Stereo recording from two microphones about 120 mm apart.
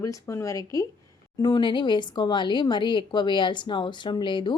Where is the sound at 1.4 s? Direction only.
40° left (ahead or behind).